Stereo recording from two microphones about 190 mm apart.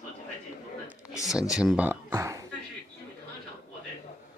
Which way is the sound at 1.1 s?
Centre (ahead or behind).